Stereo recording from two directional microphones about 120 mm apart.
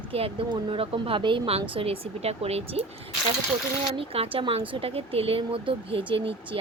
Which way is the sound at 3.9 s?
50° right (ahead or behind).